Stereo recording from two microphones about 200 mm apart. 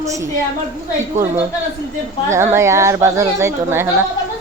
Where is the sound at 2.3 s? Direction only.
15° right (ahead or behind).